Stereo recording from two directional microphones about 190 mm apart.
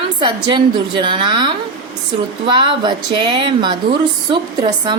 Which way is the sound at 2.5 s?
25° right (ahead or behind).